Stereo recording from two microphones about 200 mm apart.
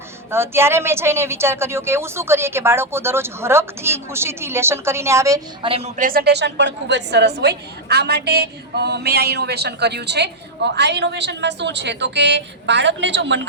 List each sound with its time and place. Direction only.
0.3 s a woman's voice: 10° right (ahead or behind)
5.6 s speech: 30° right (ahead or behind)
6.0 s a woman's voice: 45° right (ahead or behind); by 13.5 s 65° right (ahead or behind)